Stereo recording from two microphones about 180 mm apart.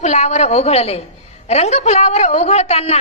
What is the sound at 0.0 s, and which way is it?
A woman's voice, 40° left (ahead or behind).